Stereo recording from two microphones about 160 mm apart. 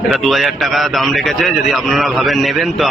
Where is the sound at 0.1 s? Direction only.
Centre (ahead or behind).